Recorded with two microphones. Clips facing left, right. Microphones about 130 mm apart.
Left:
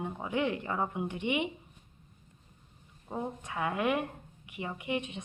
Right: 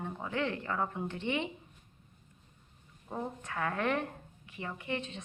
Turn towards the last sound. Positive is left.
turn(degrees=15)  # may be behind; listen again after turning